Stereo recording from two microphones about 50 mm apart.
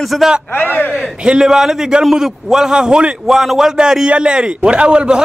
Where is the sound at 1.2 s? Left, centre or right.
Centre.